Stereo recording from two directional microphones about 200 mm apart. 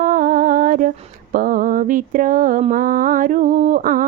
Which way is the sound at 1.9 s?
40° right (ahead or behind).